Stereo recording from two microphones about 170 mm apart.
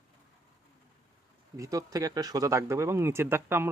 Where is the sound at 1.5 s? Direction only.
20° right (ahead or behind).